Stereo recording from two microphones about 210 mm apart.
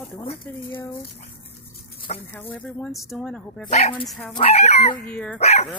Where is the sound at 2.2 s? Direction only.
10° left (ahead or behind).